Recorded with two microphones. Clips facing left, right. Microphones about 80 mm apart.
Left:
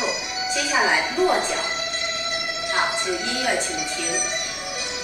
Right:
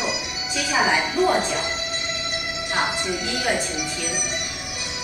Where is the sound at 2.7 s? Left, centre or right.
Centre.